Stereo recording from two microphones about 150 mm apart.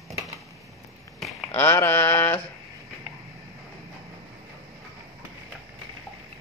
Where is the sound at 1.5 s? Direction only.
15° left (ahead or behind).